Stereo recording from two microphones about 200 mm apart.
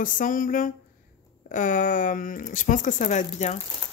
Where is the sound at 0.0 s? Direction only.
40° left (ahead or behind).